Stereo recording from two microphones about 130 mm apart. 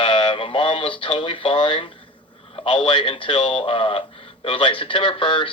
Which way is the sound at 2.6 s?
40° left (ahead or behind).